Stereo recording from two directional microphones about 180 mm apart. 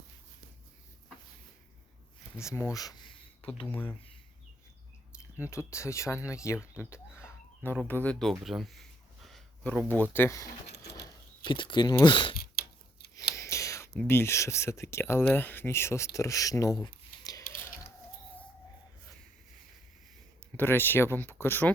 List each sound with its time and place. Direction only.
2.4 s speech: 15° left (ahead or behind)
3.7 s speech: 10° left (ahead or behind)
5.4 s speech: 15° left (ahead or behind)
6.7 s a sound: 15° left (ahead or behind)
7.9 s speech: 10° left (ahead or behind)
10.0 s speech: 10° left (ahead or behind)
10.7 s a sound: 65° left (ahead or behind)
11.0 s speech: 25° left (ahead or behind)
12.4 s a sound: 55° left (ahead or behind)
13.3 s whispering: 15° left (ahead or behind)
13.9 s speech: 10° left (ahead or behind)
16.8 s a sound: 20° left (ahead or behind)
20.6 s speech: 10° left (ahead or behind)